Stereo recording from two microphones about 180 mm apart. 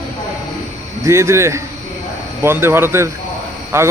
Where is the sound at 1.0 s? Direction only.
15° right (ahead or behind).